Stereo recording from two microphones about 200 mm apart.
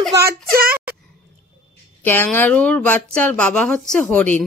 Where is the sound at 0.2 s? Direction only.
50° right (ahead or behind).